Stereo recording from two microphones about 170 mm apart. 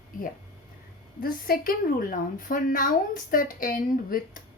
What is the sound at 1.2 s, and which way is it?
A woman's voice, 60° left (ahead or behind).